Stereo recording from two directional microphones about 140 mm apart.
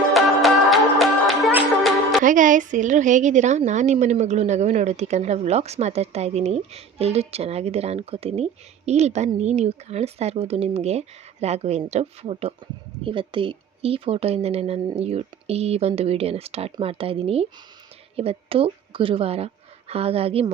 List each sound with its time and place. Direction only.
0.1 s music: centre (ahead or behind)
2.2 s a woman's voice: 70° right (ahead or behind); by 20.5 s 45° right (ahead or behind)